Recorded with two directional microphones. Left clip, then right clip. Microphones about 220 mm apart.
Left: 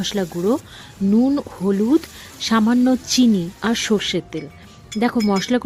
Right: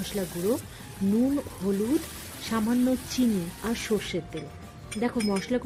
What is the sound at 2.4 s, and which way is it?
Speech, 45° left (ahead or behind).